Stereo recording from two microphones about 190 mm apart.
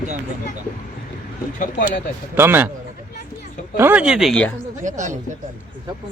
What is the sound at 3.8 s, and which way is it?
Speech, 10° right (ahead or behind).